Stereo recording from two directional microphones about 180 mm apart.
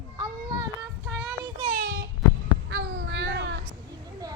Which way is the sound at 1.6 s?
45° right (ahead or behind).